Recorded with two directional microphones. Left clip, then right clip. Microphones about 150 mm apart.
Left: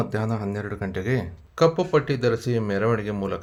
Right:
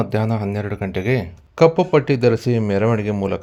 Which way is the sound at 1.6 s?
45° right (ahead or behind).